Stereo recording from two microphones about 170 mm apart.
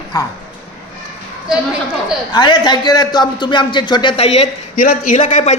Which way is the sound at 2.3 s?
25° left (ahead or behind).